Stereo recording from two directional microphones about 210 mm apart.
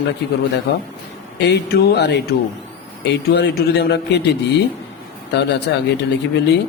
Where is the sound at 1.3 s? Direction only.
55° left (ahead or behind).